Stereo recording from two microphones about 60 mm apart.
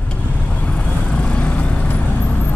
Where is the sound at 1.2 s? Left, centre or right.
Centre.